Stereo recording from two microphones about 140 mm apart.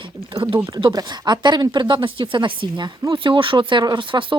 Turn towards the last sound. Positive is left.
turn(degrees=-35)  # may be behind; listen again after turning